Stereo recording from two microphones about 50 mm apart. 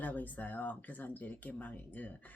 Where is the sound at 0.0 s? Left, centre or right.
Left.